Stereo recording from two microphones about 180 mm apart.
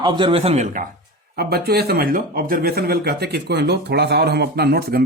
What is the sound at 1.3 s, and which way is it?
Speech, 60° right (ahead or behind).